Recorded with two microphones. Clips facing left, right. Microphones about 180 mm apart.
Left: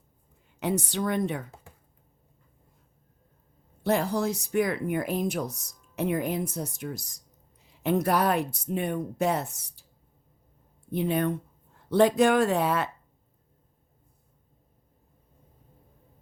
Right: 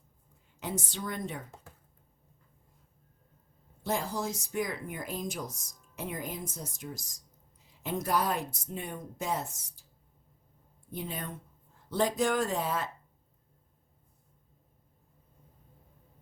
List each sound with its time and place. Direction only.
0.6 s speech: 65° left (ahead or behind)
1.5 s a sound: 10° left (ahead or behind)
3.8 s speech: 65° left (ahead or behind)
10.9 s speech: 65° left (ahead or behind)